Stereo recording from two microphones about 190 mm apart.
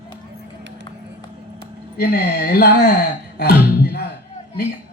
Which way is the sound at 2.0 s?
55° left (ahead or behind).